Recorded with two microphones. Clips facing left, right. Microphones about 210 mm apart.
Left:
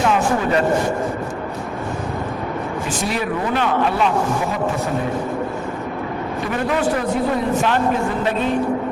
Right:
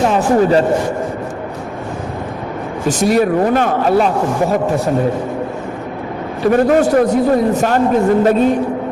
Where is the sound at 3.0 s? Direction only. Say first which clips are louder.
Right 11 dB; 45° right (ahead or behind).